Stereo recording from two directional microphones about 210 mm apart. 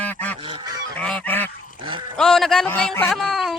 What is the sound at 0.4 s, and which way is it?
Goose, 25° right (ahead or behind).